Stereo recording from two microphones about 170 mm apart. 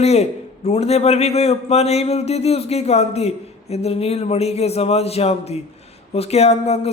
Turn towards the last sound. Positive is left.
turn(degrees=40)  # may be behind; listen again after turning